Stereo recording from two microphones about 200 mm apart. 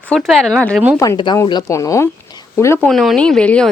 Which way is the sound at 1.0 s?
20° left (ahead or behind).